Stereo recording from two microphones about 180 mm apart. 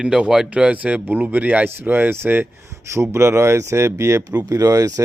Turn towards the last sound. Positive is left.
turn(degrees=-20)  # may be behind; listen again after turning